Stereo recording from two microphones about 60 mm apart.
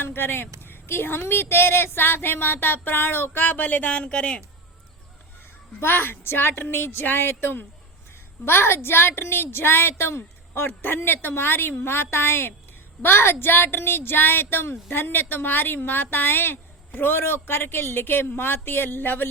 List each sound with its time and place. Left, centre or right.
0.0 s a woman's voice: left
3.3 s speech: left
5.8 s a woman's voice: left